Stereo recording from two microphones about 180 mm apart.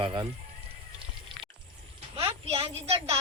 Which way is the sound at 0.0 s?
30° right (ahead or behind).